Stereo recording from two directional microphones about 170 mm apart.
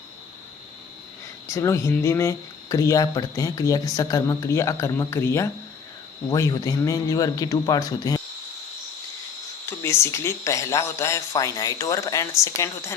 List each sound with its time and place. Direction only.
1.5 s speech: 20° left (ahead or behind)
9.6 s a man's voice: 15° left (ahead or behind)